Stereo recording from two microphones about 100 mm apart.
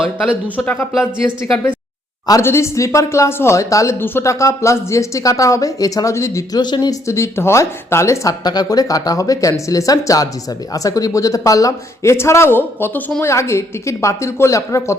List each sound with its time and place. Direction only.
0.5 s a woman's voice: 15° left (ahead or behind)
2.4 s speech: 25° left (ahead or behind)
6.6 s speech: 45° left (ahead or behind)
7.1 s a woman's voice: 25° left (ahead or behind)